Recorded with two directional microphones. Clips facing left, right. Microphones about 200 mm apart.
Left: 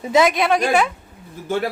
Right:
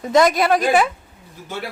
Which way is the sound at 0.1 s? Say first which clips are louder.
Right 1 dB; centre (ahead or behind).